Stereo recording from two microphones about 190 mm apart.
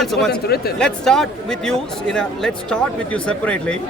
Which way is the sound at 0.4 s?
55° left (ahead or behind).